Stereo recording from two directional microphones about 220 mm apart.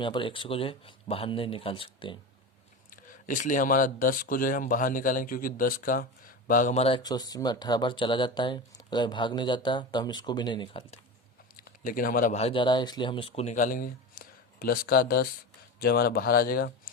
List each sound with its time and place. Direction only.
0.0 s speech: 20° left (ahead or behind)
2.9 s speech: 35° left (ahead or behind); by 11.0 s 20° left (ahead or behind)
11.6 s speech: 40° left (ahead or behind)